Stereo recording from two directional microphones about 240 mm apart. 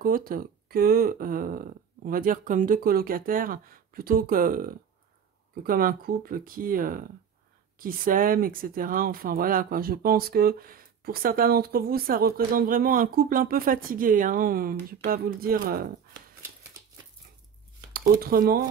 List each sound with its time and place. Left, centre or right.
0.0 s speech: right
17.9 s speech: right